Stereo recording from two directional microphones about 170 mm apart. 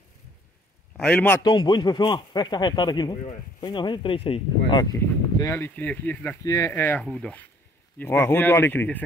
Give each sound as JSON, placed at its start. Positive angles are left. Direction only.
{"t": 0.9, "sound": "a man's voice", "side_deg": 5}
{"t": 1.4, "sound": "speech", "side_deg": 25}
{"t": 4.9, "sound": "speech", "side_deg": 15}